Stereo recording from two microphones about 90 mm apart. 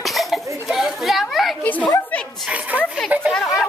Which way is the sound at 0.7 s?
5° right (ahead or behind).